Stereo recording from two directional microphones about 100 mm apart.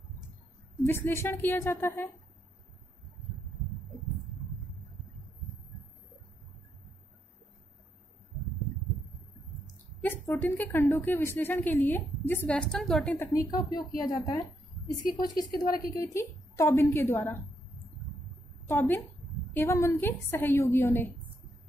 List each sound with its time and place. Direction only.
0.8 s a woman's voice: 20° left (ahead or behind)
10.0 s a woman's voice: 20° left (ahead or behind)
12.4 s a woman's voice: 5° left (ahead or behind)
13.3 s a woman's voice: 35° left (ahead or behind)
18.7 s a woman's voice: 25° left (ahead or behind)